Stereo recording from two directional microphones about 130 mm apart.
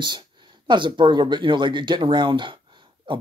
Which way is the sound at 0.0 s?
35° right (ahead or behind).